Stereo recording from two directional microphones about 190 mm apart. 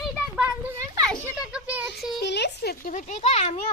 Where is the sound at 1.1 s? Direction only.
5° right (ahead or behind).